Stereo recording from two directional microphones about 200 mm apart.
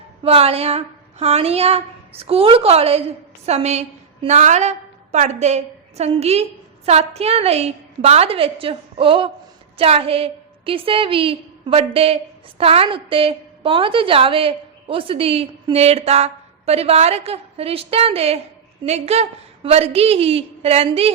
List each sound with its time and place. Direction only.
0.2 s a woman's voice: 30° right (ahead or behind)